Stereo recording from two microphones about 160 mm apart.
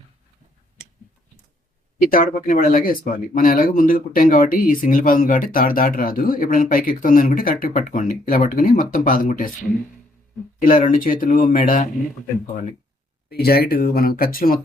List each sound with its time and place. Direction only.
2.0 s speech: 60° left (ahead or behind)
10.6 s speech: 55° left (ahead or behind)
13.3 s speech: 75° left (ahead or behind)